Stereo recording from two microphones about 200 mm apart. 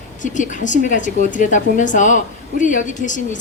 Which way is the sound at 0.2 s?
40° left (ahead or behind).